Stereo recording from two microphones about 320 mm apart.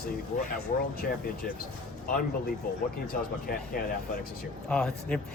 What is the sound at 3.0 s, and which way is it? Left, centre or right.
Speech, left.